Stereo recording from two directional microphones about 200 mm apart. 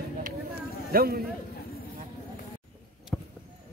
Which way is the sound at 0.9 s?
50° right (ahead or behind).